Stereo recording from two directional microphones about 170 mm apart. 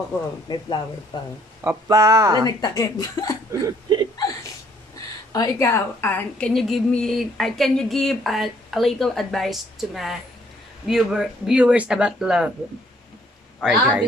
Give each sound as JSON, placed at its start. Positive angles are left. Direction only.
{"t": 0.5, "sound": "speech", "side_deg": 25}
{"t": 1.6, "sound": "speech", "side_deg": -15}
{"t": 2.6, "sound": "speech", "side_deg": 20}
{"t": 3.6, "sound": "a sound", "side_deg": -25}
{"t": 5.3, "sound": "a woman's voice", "side_deg": 20}
{"t": 13.6, "sound": "a woman's voice", "side_deg": -5}